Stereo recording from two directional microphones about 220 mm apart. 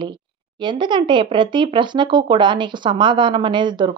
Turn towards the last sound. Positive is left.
turn(degrees=-20)  # may be behind; listen again after turning